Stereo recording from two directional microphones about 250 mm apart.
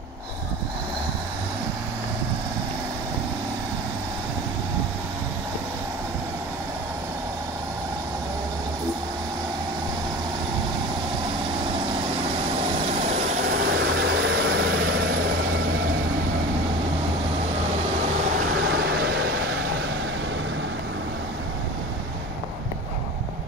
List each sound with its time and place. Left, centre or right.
13.7 s vehicle: right
18.6 s vehicle: right